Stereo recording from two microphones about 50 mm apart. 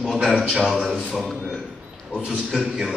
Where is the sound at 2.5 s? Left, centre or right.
Centre.